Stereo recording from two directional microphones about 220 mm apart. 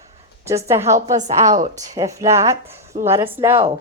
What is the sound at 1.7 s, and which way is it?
A woman's voice, 15° right (ahead or behind).